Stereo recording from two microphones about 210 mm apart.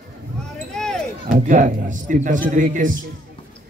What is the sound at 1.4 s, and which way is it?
A man's voice, 40° right (ahead or behind).